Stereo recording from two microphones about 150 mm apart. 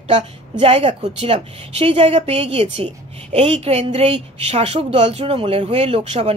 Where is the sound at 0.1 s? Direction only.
40° right (ahead or behind).